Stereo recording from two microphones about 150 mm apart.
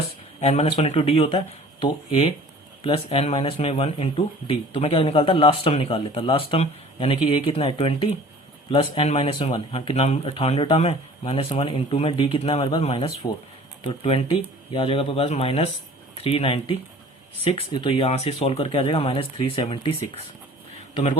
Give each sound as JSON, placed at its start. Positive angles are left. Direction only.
{"t": 0.3, "sound": "a man's voice", "side_deg": 45}